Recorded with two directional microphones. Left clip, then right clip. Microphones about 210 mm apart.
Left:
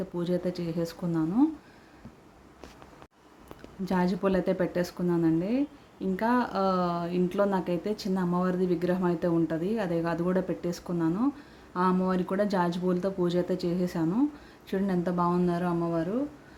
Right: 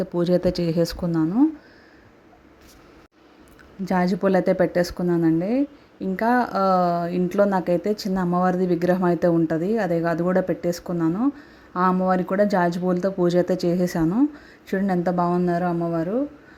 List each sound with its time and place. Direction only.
0.0 s speech: 30° right (ahead or behind)
3.8 s a woman's voice: 25° right (ahead or behind)